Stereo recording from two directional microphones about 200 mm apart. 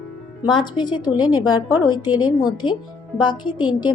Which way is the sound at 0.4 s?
25° left (ahead or behind).